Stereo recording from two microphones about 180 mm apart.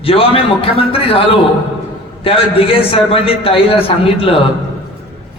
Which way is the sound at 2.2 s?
30° left (ahead or behind).